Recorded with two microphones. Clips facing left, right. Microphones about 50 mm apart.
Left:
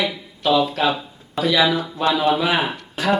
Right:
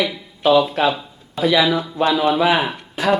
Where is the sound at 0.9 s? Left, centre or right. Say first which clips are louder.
Right 1 dB; centre.